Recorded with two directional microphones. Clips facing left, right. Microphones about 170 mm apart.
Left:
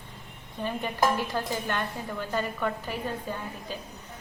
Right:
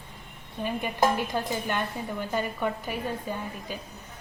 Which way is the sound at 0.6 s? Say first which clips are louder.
Right 1 dB; 15° right (ahead or behind).